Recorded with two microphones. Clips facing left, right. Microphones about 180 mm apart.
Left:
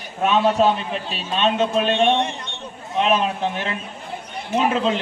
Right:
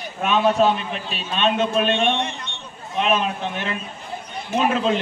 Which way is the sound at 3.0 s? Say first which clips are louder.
Left 2 dB; 35° left (ahead or behind).